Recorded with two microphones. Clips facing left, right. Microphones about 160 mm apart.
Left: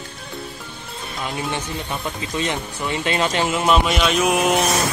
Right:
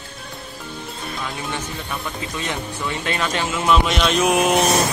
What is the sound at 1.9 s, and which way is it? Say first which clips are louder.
Speech: left 1 dB; 20° left (ahead or behind).